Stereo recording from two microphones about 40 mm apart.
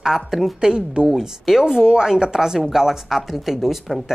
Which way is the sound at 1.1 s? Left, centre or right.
Centre.